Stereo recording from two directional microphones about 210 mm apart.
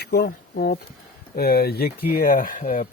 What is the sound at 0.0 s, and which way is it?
Speech, 50° left (ahead or behind).